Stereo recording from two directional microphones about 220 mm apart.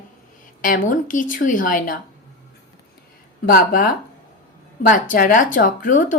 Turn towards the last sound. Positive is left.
turn(degrees=35)  # may be behind; listen again after turning